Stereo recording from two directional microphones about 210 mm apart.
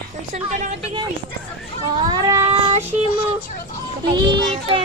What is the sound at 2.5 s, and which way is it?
Child singing, 30° right (ahead or behind).